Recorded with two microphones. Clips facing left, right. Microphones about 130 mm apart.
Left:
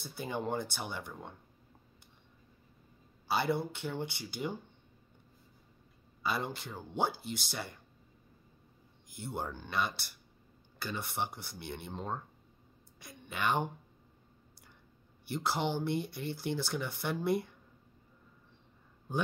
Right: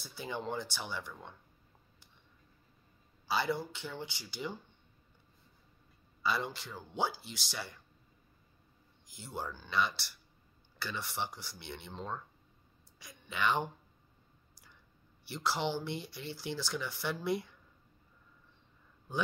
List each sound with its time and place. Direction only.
0.0 s speech: 50° left (ahead or behind)
3.3 s speech: 55° left (ahead or behind)
6.2 s speech: 50° left (ahead or behind)
9.0 s a man's voice: 55° left (ahead or behind)
15.2 s speech: 50° left (ahead or behind)